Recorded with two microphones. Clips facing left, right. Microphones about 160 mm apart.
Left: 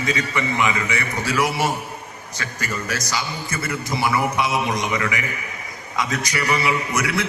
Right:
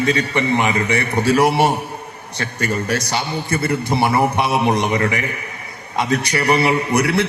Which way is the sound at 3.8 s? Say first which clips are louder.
Right 3 dB; 60° right (ahead or behind).